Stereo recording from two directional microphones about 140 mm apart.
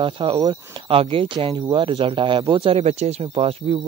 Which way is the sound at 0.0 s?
35° right (ahead or behind).